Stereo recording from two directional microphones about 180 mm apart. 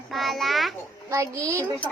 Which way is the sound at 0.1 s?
Centre (ahead or behind).